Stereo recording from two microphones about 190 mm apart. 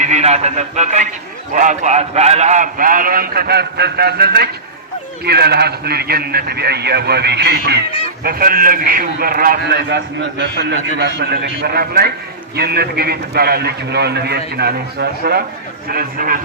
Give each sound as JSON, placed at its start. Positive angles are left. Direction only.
{"t": 0.0, "sound": "a man's voice", "side_deg": -35}